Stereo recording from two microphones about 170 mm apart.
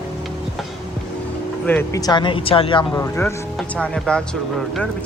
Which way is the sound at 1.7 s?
15° left (ahead or behind).